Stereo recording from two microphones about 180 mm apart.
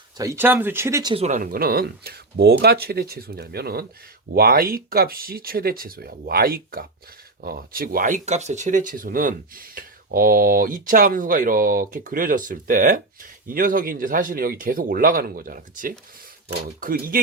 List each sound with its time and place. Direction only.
0.2 s speech: 15° right (ahead or behind)
1.1 s speech: 40° right (ahead or behind)